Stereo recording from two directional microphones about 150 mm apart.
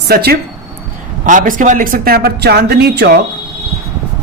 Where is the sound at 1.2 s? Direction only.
60° right (ahead or behind); by 3.2 s 90° right.